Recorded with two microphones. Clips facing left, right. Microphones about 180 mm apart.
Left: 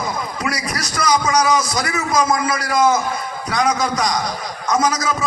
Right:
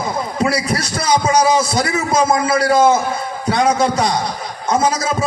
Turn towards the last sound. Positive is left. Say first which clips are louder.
# right 2 dB
turn(degrees=-30)  # may be behind; listen again after turning